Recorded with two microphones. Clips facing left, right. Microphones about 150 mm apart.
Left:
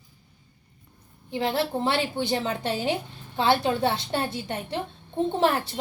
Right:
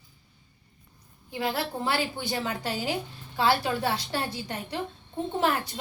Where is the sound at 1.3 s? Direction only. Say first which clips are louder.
Left 4 dB; 25° left (ahead or behind).